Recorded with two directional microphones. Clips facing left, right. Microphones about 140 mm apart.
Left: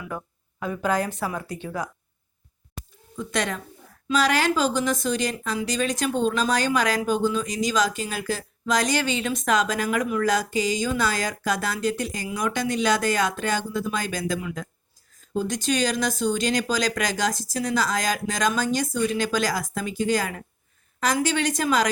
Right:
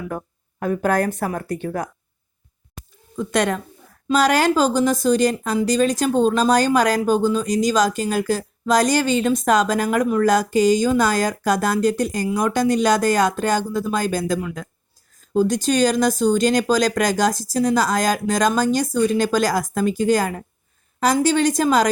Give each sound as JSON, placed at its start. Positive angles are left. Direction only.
{"t": 0.6, "sound": "speech", "side_deg": -50}
{"t": 2.8, "sound": "a sound", "side_deg": 0}
{"t": 3.2, "sound": "speech", "side_deg": -50}